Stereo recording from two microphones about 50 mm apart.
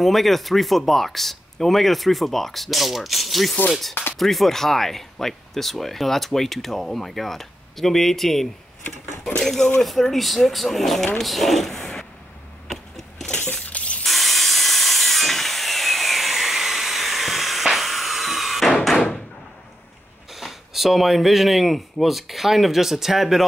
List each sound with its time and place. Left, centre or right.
0.0 s speech: centre
12.6 s a sound: centre
13.3 s a sound: left
13.7 s ratchet: left
14.0 s wood: centre
18.9 s door: centre
20.3 s speech: centre